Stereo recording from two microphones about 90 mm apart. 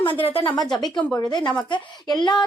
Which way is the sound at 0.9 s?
15° left (ahead or behind).